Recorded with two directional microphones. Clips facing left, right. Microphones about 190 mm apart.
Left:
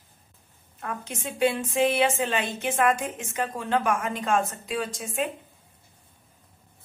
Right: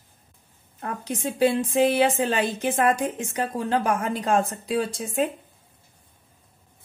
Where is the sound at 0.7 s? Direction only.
35° right (ahead or behind).